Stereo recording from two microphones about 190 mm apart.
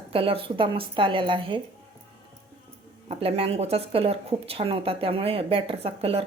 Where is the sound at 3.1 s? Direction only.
30° right (ahead or behind).